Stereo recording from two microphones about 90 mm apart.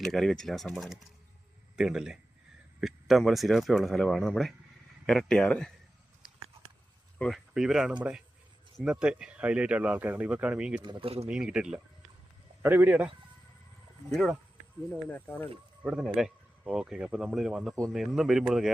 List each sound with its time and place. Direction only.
0.0 s a man's voice: 5° left (ahead or behind)
7.3 s speech: 5° right (ahead or behind)
10.8 s speech: 90° right
11.3 s speech: 10° right (ahead or behind)
12.6 s speech: 25° right (ahead or behind)
15.1 s speech: 20° left (ahead or behind)
15.8 s speech: 10° right (ahead or behind)